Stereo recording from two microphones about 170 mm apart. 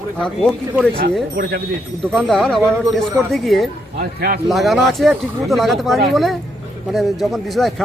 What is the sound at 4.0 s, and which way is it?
Speech, 60° right (ahead or behind).